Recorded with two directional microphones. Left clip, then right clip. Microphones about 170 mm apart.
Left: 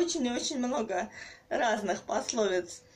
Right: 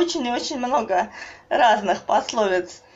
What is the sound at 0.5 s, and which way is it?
Speech, 45° right (ahead or behind).